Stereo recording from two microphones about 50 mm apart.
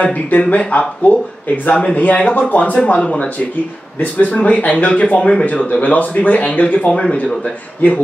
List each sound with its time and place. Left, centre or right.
0.0 s speech: left